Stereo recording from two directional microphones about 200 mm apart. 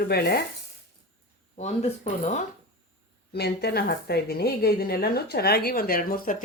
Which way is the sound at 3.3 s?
55° left (ahead or behind).